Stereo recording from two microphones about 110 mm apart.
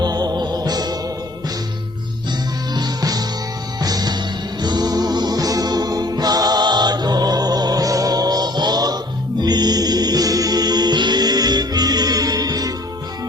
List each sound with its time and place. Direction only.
0.0 s music: 40° right (ahead or behind)
2.7 s music: 35° right (ahead or behind)